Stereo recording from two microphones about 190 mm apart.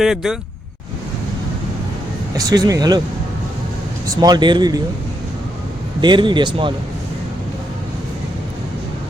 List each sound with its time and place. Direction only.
0.0 s speech: centre (ahead or behind)
2.4 s speech: 20° right (ahead or behind)
4.0 s speech: 20° right (ahead or behind)
6.0 s speech: 25° right (ahead or behind)